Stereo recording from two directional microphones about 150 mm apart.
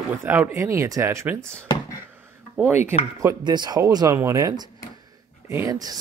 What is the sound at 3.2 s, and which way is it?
Speech, 25° right (ahead or behind).